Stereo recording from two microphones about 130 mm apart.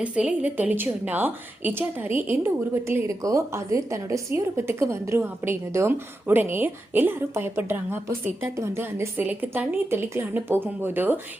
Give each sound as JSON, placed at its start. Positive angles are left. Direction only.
{"t": 0.0, "sound": "a woman's voice", "side_deg": -10}